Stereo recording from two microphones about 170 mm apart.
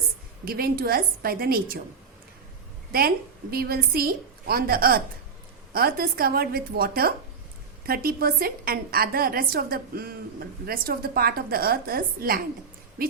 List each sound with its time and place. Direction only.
0.4 s a woman's voice: 60° right (ahead or behind)
3.5 s a woman's voice: 65° right (ahead or behind)